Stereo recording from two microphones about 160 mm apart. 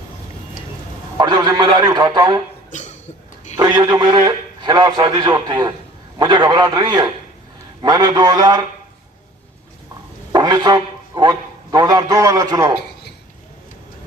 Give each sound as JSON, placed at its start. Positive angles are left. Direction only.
{"t": 1.2, "sound": "a man's voice", "side_deg": -25}
{"t": 2.6, "sound": "a sound", "side_deg": 50}
{"t": 3.6, "sound": "a man's voice", "side_deg": -25}
{"t": 10.3, "sound": "a man's voice", "side_deg": -25}